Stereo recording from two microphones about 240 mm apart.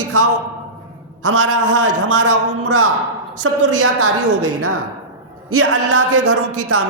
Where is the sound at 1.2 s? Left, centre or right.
Right.